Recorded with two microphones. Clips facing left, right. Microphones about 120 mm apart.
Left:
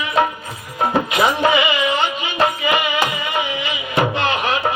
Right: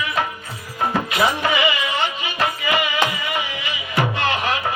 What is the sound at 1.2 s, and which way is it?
Music, 25° left (ahead or behind).